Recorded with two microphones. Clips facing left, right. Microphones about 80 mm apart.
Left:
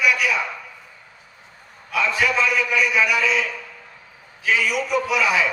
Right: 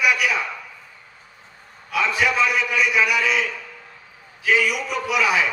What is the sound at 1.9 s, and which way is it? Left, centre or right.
Speech, right.